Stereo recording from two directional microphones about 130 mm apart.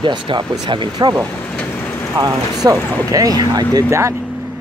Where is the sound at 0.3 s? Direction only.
40° right (ahead or behind).